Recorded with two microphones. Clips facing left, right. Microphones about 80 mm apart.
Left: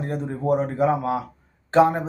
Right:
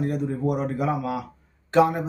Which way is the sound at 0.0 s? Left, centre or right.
Left.